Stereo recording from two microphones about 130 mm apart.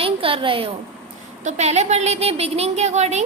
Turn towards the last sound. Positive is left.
turn(degrees=-60)  # may be behind; listen again after turning